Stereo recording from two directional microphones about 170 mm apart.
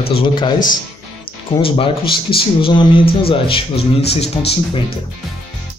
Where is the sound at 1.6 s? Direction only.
30° left (ahead or behind).